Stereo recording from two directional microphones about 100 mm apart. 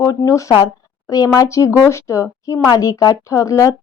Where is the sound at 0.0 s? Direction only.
30° left (ahead or behind).